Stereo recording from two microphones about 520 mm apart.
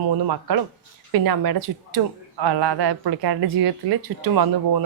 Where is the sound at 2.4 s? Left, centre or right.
Right.